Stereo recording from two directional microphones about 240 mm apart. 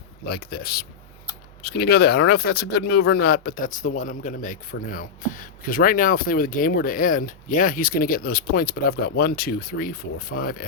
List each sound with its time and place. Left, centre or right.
0.3 s speech: left